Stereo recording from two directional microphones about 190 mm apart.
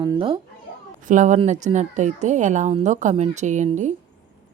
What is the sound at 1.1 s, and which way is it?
A woman's voice, 40° right (ahead or behind).